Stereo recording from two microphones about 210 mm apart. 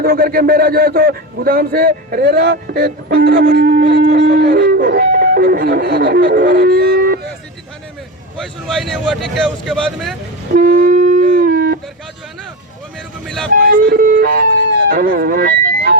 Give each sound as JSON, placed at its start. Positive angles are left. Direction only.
{"t": 0.0, "sound": "a man's voice", "side_deg": -50}
{"t": 8.4, "sound": "speech", "side_deg": 0}
{"t": 10.5, "sound": "a sound", "side_deg": -45}
{"t": 13.5, "sound": "a man's voice", "side_deg": -45}